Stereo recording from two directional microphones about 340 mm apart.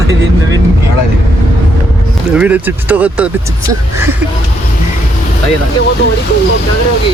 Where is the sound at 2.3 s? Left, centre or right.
Centre.